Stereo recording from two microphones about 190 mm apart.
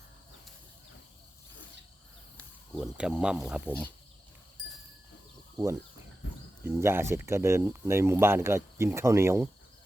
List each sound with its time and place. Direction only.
2.4 s speech: centre (ahead or behind)
5.5 s speech: 15° right (ahead or behind)